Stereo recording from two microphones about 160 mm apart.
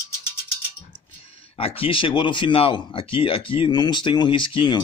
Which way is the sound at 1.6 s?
35° left (ahead or behind).